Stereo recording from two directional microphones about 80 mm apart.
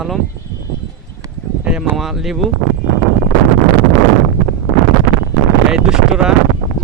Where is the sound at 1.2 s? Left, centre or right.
Right.